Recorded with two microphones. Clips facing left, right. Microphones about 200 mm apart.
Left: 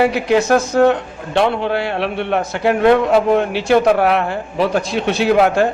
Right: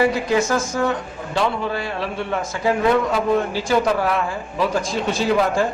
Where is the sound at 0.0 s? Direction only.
70° left (ahead or behind).